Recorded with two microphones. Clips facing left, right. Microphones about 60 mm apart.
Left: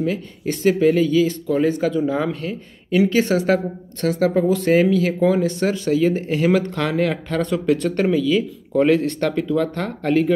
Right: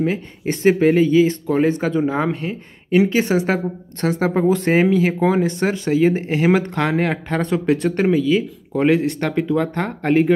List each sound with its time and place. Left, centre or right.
0.0 s speech: right